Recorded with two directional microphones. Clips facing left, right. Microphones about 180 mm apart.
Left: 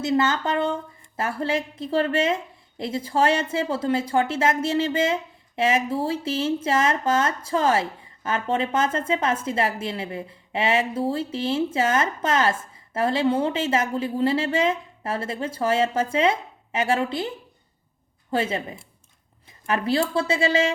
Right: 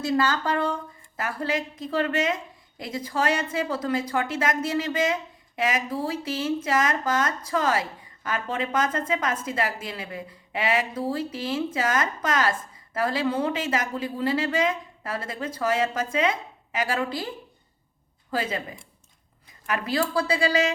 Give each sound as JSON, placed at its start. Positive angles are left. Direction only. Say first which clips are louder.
{"t": 0.0, "sound": "a woman's voice", "louder": "left 2 dB", "side_deg": 20}